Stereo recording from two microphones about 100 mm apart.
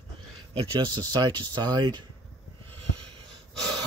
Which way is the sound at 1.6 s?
45° right (ahead or behind).